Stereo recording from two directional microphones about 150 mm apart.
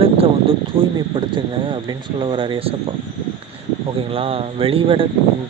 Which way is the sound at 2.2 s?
35° right (ahead or behind).